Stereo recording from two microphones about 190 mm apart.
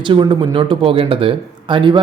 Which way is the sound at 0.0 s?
25° right (ahead or behind).